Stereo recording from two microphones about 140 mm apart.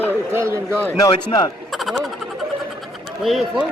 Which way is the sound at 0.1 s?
15° right (ahead or behind).